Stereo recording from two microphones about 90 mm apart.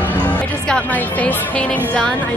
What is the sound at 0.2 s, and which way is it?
Speech, 10° left (ahead or behind).